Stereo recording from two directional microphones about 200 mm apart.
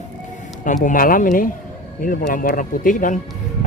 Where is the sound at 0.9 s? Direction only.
45° left (ahead or behind).